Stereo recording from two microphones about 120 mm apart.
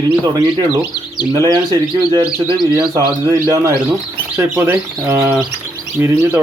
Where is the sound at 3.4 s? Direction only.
25° right (ahead or behind).